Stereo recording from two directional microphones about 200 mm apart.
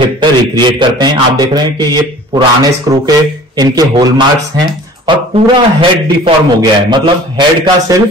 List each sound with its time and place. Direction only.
0.0 s a man's voice: 25° right (ahead or behind)